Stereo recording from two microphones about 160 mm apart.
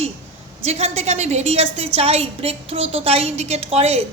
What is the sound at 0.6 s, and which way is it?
A woman's voice, 45° right (ahead or behind).